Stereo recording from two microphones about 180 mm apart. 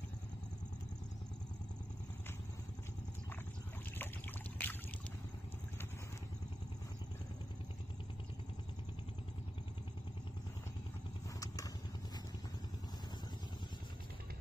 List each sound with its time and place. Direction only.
4.6 s boat: 10° left (ahead or behind)
11.3 s vehicle: 20° left (ahead or behind)